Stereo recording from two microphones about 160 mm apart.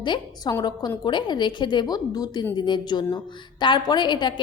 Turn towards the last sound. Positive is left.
turn(degrees=30)  # may be behind; listen again after turning